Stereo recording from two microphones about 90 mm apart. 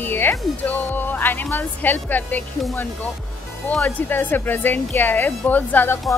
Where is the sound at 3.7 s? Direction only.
15° left (ahead or behind).